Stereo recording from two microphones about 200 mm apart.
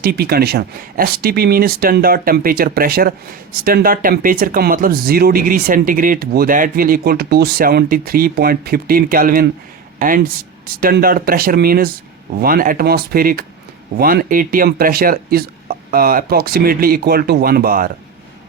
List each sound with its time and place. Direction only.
0.0 s speech: 50° right (ahead or behind)
10.8 s speech: 45° right (ahead or behind)